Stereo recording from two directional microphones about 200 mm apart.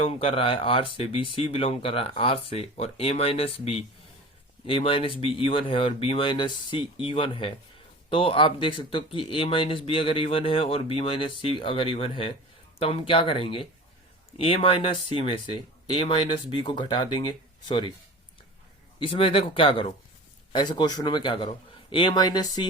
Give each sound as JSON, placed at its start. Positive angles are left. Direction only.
{"t": 0.0, "sound": "speech", "side_deg": 30}
{"t": 18.9, "sound": "speech", "side_deg": 25}